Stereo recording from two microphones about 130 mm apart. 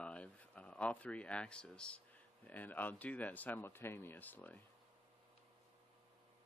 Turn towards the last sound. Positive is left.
turn(degrees=15)  # may be behind; listen again after turning